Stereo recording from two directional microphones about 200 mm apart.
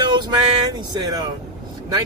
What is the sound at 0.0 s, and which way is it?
Speech, 20° right (ahead or behind).